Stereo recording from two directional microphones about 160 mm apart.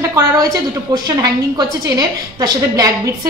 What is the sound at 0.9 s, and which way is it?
A woman's voice, 25° right (ahead or behind).